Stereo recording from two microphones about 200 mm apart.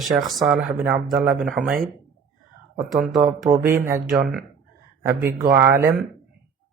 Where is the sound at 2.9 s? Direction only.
Centre (ahead or behind).